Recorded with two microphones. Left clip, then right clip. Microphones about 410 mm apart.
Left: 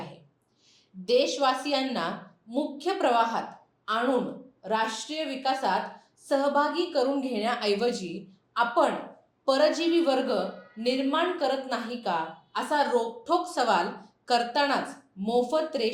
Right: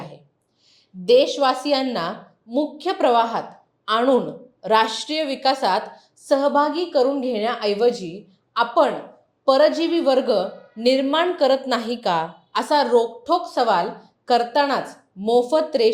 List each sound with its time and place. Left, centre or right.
1.0 s a woman's voice: right